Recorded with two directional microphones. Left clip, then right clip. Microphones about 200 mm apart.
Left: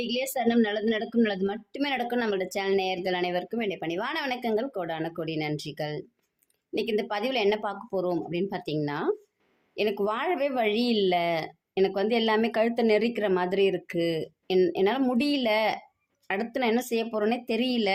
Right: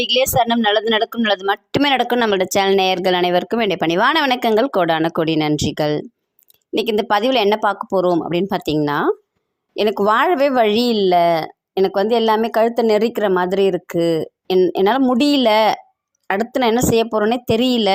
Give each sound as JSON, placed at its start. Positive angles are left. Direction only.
{"t": 0.0, "sound": "speech", "side_deg": -45}